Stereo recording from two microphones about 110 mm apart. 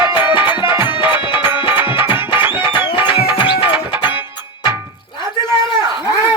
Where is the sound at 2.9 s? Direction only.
50° left (ahead or behind).